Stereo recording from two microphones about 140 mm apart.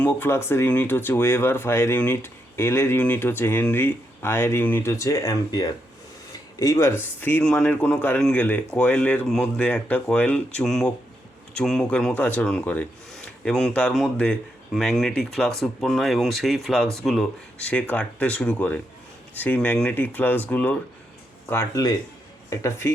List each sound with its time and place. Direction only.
0.0 s speech: 15° left (ahead or behind)